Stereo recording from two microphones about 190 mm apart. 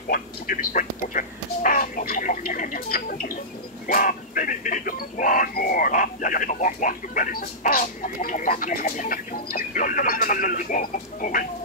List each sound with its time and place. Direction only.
0.1 s speech: 50° left (ahead or behind)